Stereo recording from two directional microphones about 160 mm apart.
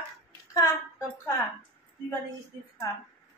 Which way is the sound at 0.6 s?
20° left (ahead or behind).